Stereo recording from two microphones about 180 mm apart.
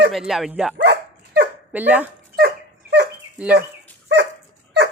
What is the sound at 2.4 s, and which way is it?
Dog, 65° right (ahead or behind).